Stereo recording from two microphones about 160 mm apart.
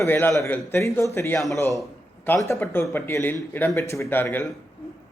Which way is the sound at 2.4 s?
15° left (ahead or behind).